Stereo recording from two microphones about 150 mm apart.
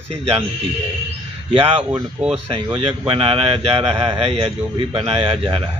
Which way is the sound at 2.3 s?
40° right (ahead or behind).